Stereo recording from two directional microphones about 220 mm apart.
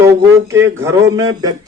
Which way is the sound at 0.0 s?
15° right (ahead or behind).